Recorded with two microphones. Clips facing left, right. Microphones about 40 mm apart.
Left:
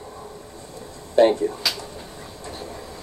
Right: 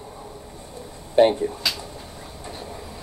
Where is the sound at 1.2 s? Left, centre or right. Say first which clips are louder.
Even; right.